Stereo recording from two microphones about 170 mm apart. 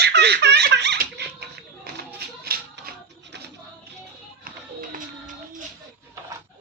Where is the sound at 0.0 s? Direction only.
75° right (ahead or behind).